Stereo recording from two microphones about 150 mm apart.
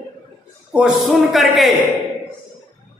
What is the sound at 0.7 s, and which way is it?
A man's voice, 5° right (ahead or behind).